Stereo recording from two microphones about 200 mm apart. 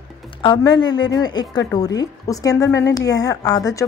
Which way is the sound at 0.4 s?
20° left (ahead or behind).